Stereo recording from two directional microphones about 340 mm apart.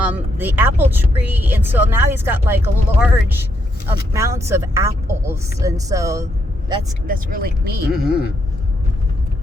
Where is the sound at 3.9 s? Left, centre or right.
Centre.